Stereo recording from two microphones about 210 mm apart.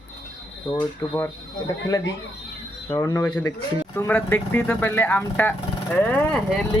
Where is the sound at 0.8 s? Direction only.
10° left (ahead or behind).